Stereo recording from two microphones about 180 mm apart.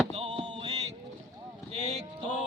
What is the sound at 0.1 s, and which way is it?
Music, 35° right (ahead or behind).